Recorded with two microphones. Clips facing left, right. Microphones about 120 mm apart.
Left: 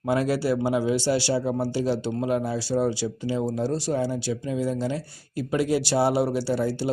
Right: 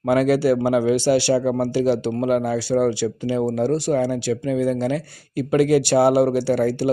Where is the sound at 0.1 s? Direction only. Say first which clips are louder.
Right 6 dB; 70° right (ahead or behind).